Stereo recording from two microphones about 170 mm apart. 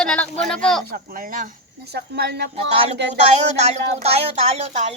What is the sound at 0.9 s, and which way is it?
Speech, 55° right (ahead or behind).